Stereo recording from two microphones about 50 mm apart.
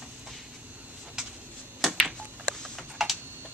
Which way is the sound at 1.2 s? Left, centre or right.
Centre.